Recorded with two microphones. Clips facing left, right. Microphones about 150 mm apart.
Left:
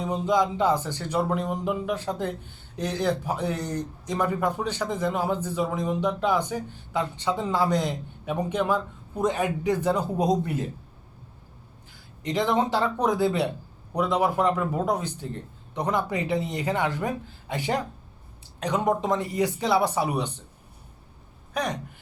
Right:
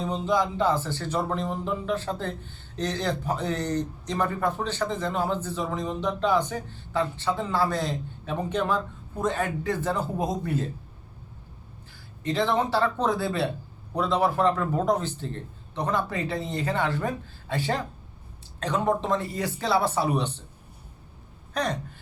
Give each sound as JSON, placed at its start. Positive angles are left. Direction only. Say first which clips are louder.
{"t": 0.0, "sound": "speech", "louder": "left 2 dB", "side_deg": 15}
{"t": 12.2, "sound": "speech", "louder": "left 1 dB", "side_deg": 15}
{"t": 21.5, "sound": "gasp", "louder": "right 1 dB", "side_deg": 10}